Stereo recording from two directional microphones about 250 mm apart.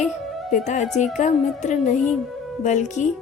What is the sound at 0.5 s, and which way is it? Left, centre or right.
A woman's voice, left.